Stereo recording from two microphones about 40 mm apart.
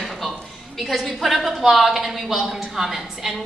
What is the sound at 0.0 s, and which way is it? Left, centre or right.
A woman's voice, centre.